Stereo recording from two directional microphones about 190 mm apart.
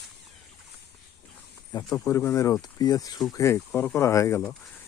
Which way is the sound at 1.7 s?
20° left (ahead or behind).